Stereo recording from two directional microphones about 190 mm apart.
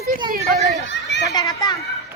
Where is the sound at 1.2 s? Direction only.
20° left (ahead or behind).